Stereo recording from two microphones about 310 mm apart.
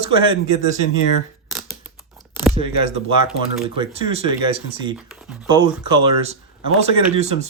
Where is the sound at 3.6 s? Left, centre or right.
Centre.